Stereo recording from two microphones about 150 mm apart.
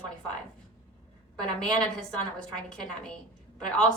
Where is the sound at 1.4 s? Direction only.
5° left (ahead or behind).